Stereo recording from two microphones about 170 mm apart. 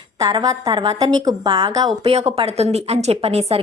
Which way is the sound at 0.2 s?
20° right (ahead or behind).